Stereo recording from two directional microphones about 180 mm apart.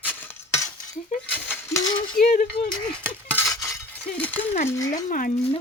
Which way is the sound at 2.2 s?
45° left (ahead or behind).